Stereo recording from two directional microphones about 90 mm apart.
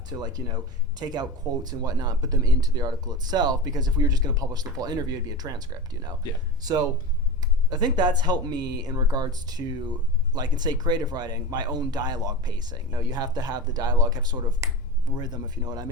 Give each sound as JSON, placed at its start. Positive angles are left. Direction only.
{"t": 0.1, "sound": "speech", "side_deg": -50}
{"t": 14.6, "sound": "speech", "side_deg": -35}
{"t": 15.2, "sound": "speech", "side_deg": -50}